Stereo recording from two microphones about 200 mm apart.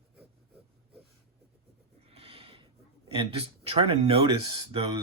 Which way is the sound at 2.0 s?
30° right (ahead or behind).